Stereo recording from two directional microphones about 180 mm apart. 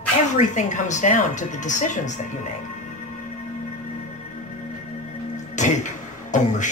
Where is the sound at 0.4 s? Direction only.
45° left (ahead or behind).